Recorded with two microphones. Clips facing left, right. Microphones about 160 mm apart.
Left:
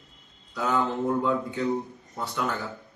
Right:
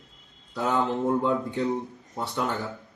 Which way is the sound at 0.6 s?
20° right (ahead or behind).